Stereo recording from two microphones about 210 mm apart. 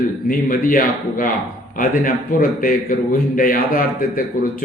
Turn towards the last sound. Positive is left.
turn(degrees=40)  # may be behind; listen again after turning